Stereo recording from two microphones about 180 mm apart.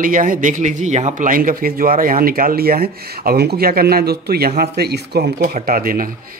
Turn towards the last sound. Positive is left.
turn(degrees=-50)  # may be behind; listen again after turning